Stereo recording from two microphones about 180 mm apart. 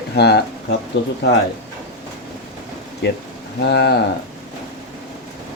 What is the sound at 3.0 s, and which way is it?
Speech, 70° left (ahead or behind).